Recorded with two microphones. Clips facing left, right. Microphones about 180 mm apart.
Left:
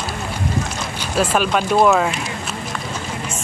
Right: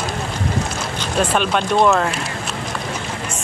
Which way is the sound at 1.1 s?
5° left (ahead or behind).